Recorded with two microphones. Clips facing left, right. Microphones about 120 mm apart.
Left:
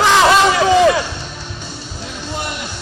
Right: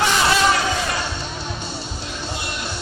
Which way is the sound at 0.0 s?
90° left.